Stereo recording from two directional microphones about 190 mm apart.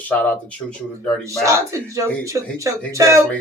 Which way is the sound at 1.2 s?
15° right (ahead or behind).